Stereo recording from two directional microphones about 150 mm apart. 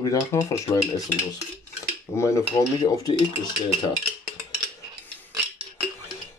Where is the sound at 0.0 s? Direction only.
20° left (ahead or behind).